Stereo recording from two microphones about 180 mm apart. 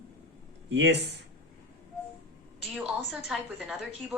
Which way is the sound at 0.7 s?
70° right (ahead or behind).